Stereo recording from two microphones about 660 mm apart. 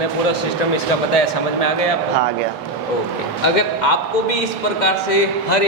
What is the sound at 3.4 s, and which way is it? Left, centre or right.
A man's voice, left.